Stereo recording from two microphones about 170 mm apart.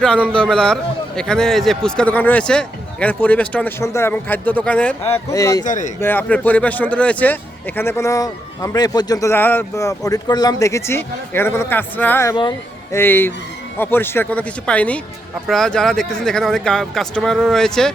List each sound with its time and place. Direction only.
0.0 s a man's voice: 5° left (ahead or behind)
5.6 s speech: 50° left (ahead or behind)
6.0 s a man's voice: 10° left (ahead or behind)